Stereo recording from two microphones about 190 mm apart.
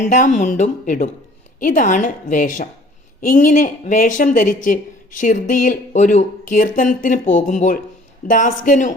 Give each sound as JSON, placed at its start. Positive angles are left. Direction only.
{"t": 0.0, "sound": "speech", "side_deg": 40}